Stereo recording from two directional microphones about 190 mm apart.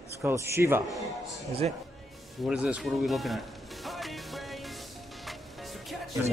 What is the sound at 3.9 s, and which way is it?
Music, centre (ahead or behind).